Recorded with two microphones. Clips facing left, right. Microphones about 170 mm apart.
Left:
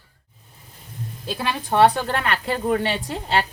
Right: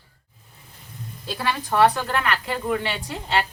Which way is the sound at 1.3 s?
20° left (ahead or behind).